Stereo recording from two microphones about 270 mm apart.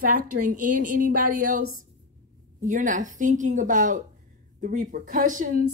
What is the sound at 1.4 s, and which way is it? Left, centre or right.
Speech, right.